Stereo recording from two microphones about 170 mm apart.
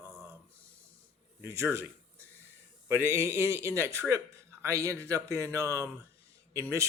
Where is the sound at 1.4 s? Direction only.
15° right (ahead or behind).